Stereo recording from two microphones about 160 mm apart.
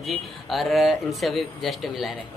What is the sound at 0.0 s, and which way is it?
Speech, centre (ahead or behind).